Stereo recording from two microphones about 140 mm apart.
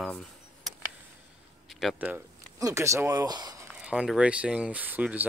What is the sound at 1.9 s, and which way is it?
Speech, 10° right (ahead or behind).